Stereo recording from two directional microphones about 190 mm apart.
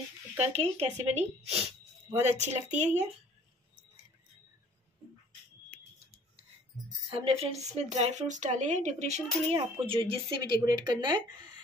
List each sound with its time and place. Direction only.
0.4 s a woman's voice: 35° right (ahead or behind)
7.1 s a woman's voice: 30° right (ahead or behind)